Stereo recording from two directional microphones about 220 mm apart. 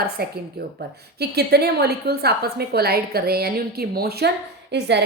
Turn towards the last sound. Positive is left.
turn(degrees=-50)  # may be behind; listen again after turning